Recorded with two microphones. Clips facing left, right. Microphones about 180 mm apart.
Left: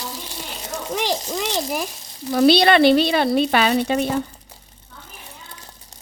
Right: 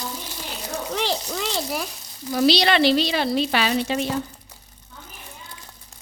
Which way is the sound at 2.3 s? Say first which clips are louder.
Left 5 dB; 55° left (ahead or behind).